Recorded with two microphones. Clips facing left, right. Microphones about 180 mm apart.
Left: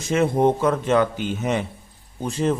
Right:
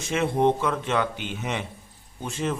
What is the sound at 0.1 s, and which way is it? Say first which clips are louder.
A man's voice: left 4 dB; 40° left (ahead or behind).